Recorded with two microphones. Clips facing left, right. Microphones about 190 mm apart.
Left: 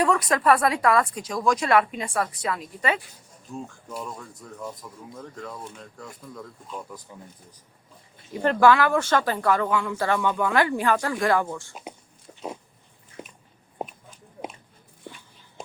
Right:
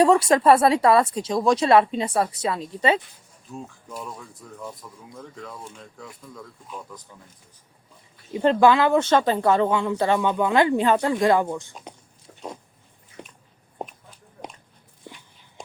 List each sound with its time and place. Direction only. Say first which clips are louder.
0.0 s speech: right 5 dB; 25° right (ahead or behind)
3.5 s speech: left 1 dB; centre (ahead or behind)
8.3 s speech: right 2 dB; 20° right (ahead or behind)
13.2 s a sound: left 1 dB; 5° left (ahead or behind)